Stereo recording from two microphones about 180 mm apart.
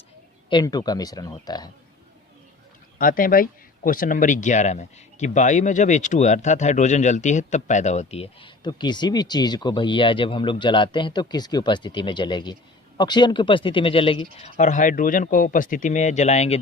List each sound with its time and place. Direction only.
0.5 s speech: 20° left (ahead or behind)
3.0 s speech: 50° left (ahead or behind); by 14.5 s 30° left (ahead or behind)
14.5 s speech: 45° left (ahead or behind)